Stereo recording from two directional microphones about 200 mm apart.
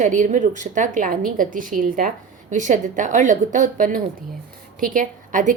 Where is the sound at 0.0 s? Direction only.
40° right (ahead or behind).